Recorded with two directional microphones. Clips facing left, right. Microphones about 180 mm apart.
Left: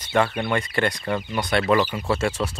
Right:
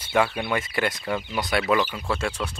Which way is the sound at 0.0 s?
5° right (ahead or behind).